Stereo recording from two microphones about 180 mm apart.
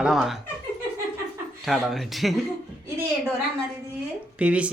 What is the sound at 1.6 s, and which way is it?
Speech, centre (ahead or behind).